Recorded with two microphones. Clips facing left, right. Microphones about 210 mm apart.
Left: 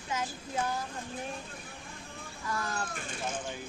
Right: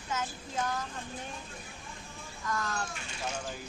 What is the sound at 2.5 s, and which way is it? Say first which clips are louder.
Speech: right 1 dB; 10° left (ahead or behind).